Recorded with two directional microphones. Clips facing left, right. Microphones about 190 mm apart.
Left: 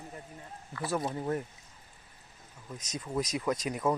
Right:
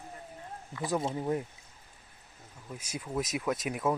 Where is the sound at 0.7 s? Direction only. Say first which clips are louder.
Right 1 dB; 15° right (ahead or behind).